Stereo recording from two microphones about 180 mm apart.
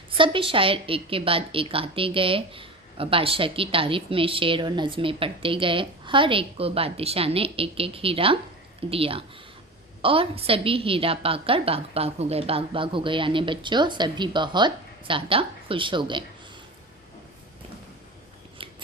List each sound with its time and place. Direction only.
0.1 s a woman's voice: 30° right (ahead or behind)